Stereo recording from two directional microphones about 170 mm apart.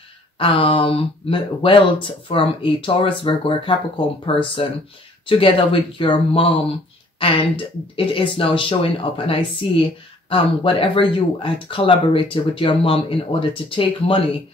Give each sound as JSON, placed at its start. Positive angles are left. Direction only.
{"t": 0.4, "sound": "speech", "side_deg": 30}